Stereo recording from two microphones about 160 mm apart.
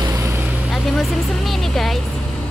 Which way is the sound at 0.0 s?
20° right (ahead or behind).